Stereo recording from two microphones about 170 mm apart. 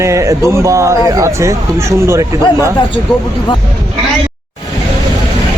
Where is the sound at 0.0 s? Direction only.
15° right (ahead or behind).